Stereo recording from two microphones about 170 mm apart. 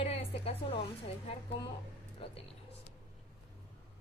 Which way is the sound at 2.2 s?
35° left (ahead or behind).